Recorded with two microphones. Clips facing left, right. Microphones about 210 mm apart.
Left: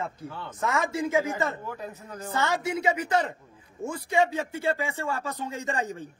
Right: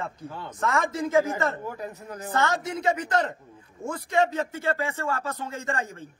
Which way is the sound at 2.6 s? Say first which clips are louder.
Even; 10° left (ahead or behind).